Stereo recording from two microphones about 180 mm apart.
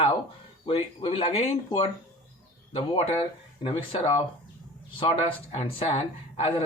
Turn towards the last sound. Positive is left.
turn(degrees=35)  # may be behind; listen again after turning